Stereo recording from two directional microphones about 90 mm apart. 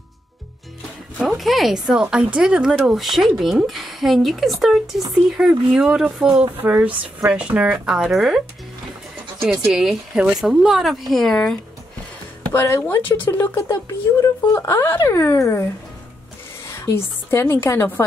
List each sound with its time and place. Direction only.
1.2 s speech: centre (ahead or behind)
5.4 s speech: 15° right (ahead or behind)
9.4 s speech: 5° right (ahead or behind)
12.6 s speech: 35° left (ahead or behind)
13.7 s speech: 40° left (ahead or behind)
16.7 s a woman's voice: 30° left (ahead or behind)